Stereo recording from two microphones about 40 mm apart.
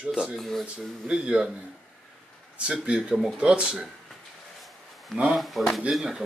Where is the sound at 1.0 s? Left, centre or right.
Right.